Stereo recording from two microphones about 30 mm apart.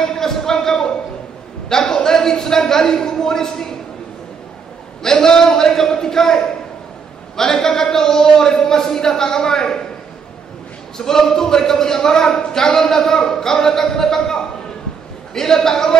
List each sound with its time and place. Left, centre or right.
0.0 s a sound: centre
1.7 s speech: centre
5.0 s speech: centre
11.0 s speech: centre